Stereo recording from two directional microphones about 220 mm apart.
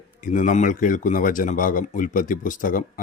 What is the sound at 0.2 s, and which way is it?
A man's voice, 35° left (ahead or behind).